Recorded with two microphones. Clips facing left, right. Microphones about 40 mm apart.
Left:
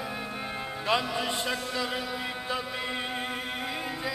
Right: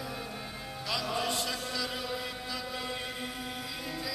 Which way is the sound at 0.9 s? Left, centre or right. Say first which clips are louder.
Left 4 dB; left.